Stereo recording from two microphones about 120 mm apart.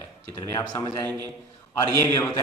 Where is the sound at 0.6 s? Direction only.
35° left (ahead or behind).